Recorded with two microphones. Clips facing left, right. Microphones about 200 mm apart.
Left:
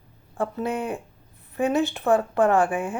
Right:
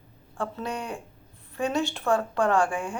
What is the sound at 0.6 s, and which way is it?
Speech, 5° left (ahead or behind).